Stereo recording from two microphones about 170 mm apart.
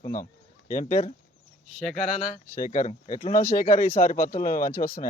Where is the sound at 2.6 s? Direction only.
50° left (ahead or behind).